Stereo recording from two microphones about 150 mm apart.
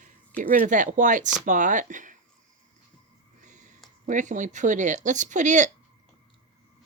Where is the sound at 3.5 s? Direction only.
55° right (ahead or behind).